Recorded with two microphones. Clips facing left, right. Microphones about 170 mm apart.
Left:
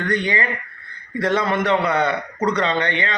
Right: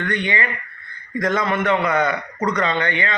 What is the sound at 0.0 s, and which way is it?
Speech, 35° left (ahead or behind).